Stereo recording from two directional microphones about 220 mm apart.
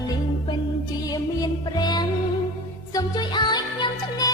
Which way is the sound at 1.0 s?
15° left (ahead or behind).